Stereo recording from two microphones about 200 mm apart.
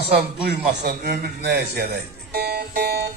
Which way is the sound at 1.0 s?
55° right (ahead or behind).